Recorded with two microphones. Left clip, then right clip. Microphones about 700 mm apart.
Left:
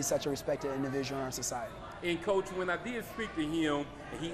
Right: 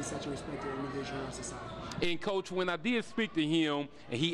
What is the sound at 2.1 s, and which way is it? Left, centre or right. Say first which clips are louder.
A man's voice: left 6 dB; right.